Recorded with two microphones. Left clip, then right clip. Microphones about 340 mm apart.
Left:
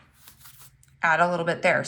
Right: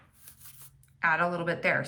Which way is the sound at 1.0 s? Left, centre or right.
Centre.